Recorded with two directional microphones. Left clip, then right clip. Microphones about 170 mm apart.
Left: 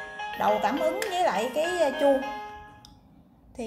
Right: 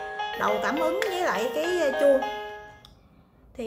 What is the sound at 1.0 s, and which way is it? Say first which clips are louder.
Speech: even; 10° right (ahead or behind).